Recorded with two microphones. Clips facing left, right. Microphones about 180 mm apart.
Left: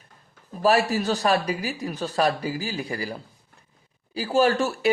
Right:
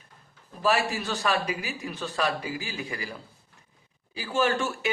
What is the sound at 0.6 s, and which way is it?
A man's voice, 40° left (ahead or behind).